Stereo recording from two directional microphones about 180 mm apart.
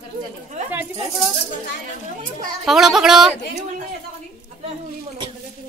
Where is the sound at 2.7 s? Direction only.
Centre (ahead or behind).